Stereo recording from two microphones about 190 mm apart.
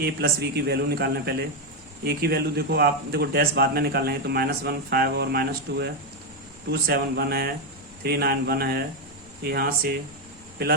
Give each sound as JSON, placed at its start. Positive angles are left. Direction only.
{"t": 0.0, "sound": "a man's voice", "side_deg": -55}